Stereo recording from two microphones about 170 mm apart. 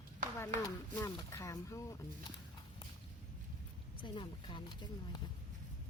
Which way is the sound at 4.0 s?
30° left (ahead or behind).